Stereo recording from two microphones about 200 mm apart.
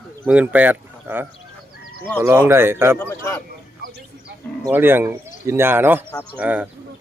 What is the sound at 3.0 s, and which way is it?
Speech, 15° left (ahead or behind).